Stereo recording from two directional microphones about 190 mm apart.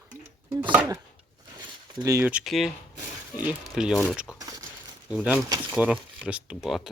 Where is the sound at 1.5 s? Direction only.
15° right (ahead or behind); by 2.7 s centre (ahead or behind).